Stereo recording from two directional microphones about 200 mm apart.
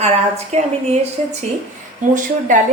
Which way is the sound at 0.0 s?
35° right (ahead or behind).